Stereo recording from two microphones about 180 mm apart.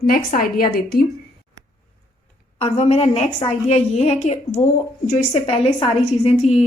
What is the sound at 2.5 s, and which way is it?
A woman's voice, 35° left (ahead or behind).